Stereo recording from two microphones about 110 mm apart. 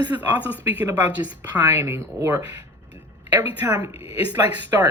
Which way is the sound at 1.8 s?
25° right (ahead or behind).